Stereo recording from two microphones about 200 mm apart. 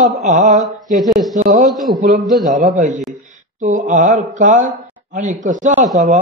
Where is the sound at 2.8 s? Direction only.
35° right (ahead or behind).